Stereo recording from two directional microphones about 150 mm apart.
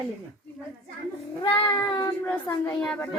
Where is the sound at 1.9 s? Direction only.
20° left (ahead or behind).